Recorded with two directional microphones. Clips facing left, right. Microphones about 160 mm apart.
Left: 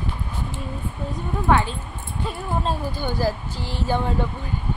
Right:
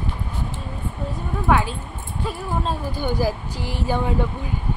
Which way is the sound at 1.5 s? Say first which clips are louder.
Even; 5° right (ahead or behind).